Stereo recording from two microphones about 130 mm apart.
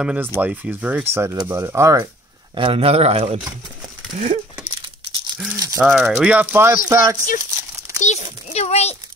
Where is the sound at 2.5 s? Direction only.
45° right (ahead or behind).